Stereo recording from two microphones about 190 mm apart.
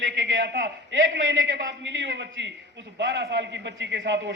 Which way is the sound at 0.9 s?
85° right.